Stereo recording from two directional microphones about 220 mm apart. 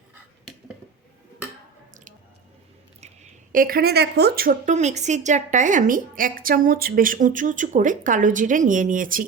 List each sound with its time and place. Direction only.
3.5 s a woman's voice: 40° right (ahead or behind)